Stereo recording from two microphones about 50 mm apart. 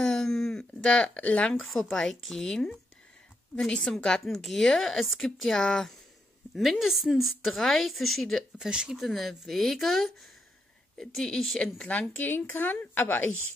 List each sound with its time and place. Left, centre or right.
0.0 s a sound: centre
0.7 s speech: left
1.5 s speech: centre
6.5 s a woman's voice: centre
8.5 s speech: centre
8.9 s a woman's voice: centre
11.5 s speech: left
12.2 s a woman's voice: left